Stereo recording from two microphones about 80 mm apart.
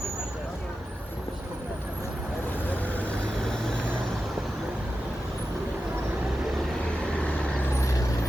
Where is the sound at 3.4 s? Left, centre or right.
Centre.